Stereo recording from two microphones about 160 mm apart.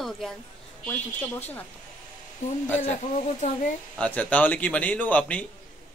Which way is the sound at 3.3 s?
45° left (ahead or behind).